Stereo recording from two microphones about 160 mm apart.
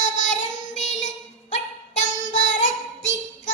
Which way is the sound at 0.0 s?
50° left (ahead or behind).